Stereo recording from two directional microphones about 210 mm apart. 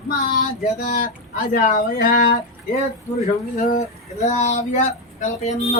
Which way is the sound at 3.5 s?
40° left (ahead or behind).